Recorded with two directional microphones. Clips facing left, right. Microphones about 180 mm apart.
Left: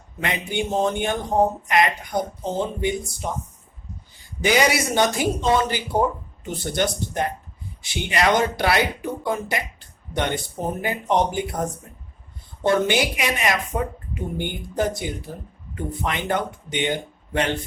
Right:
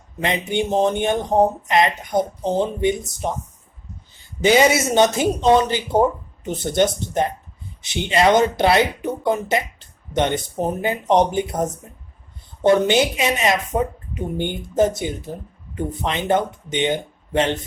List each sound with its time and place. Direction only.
0.2 s speech: 20° right (ahead or behind)
4.4 s speech: 25° right (ahead or behind)